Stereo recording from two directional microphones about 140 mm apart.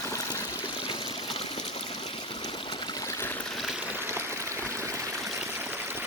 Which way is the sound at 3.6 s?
Centre (ahead or behind).